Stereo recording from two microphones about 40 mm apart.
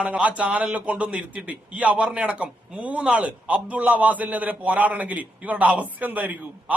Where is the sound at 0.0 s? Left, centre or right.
Right.